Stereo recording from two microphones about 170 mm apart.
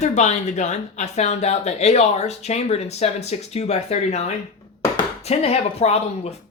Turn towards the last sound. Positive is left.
turn(degrees=40)  # may be behind; listen again after turning